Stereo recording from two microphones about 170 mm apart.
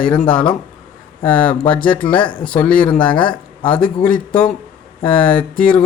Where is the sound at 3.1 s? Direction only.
30° left (ahead or behind).